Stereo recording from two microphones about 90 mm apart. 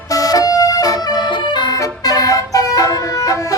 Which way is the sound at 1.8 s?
45° left (ahead or behind).